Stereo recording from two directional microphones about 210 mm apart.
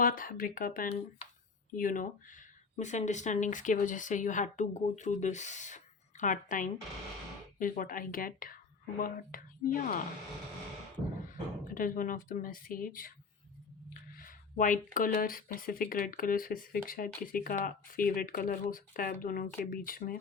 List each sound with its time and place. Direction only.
0.0 s speech: 40° left (ahead or behind)
11.3 s speech: 40° left (ahead or behind)
14.2 s speech: 40° left (ahead or behind)